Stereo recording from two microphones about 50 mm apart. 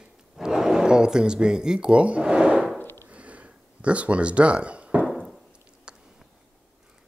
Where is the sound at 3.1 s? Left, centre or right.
Right.